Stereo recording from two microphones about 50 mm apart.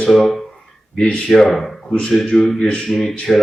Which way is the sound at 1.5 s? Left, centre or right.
Centre.